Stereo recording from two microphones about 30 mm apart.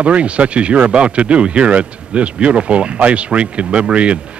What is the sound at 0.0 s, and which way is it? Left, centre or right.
Speech, right.